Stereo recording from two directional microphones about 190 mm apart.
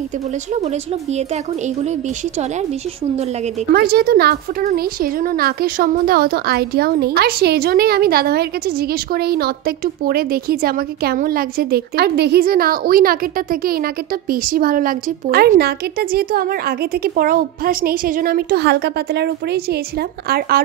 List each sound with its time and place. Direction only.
3.7 s a woman's voice: 55° right (ahead or behind)